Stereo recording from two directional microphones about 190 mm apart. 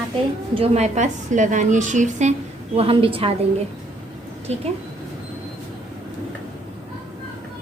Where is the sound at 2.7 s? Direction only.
30° right (ahead or behind).